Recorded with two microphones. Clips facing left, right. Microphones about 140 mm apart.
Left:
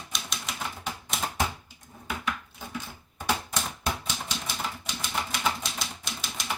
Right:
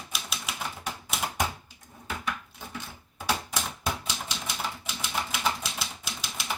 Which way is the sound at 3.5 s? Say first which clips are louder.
Even; centre (ahead or behind).